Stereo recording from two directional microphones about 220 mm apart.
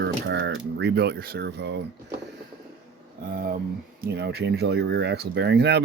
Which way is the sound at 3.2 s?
40° right (ahead or behind).